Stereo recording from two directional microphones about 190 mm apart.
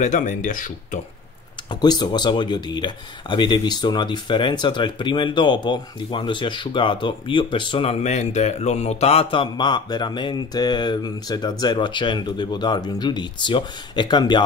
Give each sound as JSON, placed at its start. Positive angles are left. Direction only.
{"t": 0.0, "sound": "speech", "side_deg": 40}
{"t": 1.7, "sound": "speech", "side_deg": 20}